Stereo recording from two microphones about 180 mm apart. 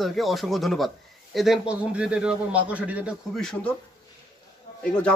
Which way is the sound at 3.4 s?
5° left (ahead or behind).